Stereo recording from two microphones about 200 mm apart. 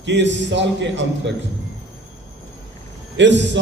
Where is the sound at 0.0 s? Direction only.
65° right (ahead or behind).